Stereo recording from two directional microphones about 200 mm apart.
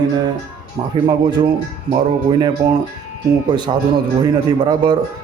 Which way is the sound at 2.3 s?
20° right (ahead or behind).